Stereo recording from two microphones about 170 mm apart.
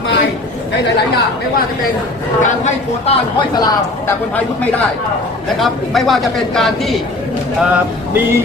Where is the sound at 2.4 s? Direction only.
45° left (ahead or behind).